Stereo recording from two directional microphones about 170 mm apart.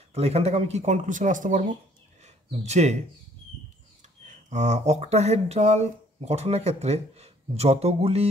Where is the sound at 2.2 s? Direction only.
40° right (ahead or behind).